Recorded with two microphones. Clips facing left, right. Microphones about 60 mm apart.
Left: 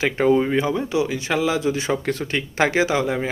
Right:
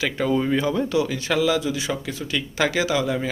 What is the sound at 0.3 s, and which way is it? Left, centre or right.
Speech, left.